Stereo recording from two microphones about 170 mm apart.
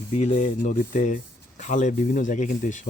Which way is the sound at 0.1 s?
45° left (ahead or behind).